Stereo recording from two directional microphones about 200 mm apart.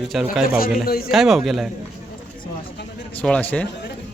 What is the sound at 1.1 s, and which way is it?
Speech, centre (ahead or behind).